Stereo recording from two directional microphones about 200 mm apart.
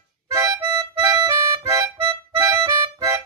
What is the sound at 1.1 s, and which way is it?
Accordion, 15° right (ahead or behind).